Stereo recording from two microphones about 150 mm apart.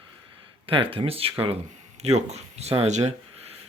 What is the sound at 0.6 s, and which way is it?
Speech, 35° right (ahead or behind).